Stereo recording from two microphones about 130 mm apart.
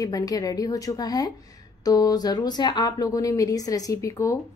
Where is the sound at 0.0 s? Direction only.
30° left (ahead or behind).